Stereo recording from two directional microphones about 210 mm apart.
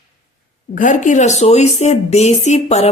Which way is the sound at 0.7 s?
35° left (ahead or behind).